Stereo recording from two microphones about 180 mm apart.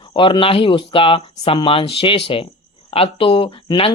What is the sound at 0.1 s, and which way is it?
Speech, 30° left (ahead or behind).